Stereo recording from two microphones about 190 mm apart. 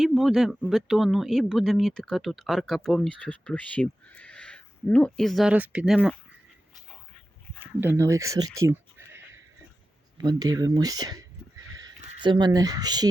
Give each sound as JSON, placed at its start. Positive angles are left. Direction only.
{"t": 0.0, "sound": "speech", "side_deg": 0}
{"t": 7.6, "sound": "bleat", "side_deg": -10}
{"t": 10.2, "sound": "speech", "side_deg": -20}